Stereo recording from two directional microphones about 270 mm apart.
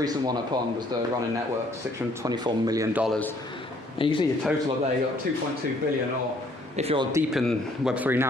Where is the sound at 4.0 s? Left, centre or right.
Centre.